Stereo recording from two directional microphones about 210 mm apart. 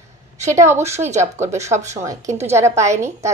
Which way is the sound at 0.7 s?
30° right (ahead or behind).